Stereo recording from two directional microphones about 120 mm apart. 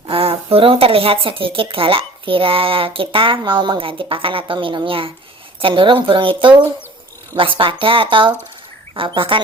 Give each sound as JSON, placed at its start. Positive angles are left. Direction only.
{"t": 0.1, "sound": "speech", "side_deg": -50}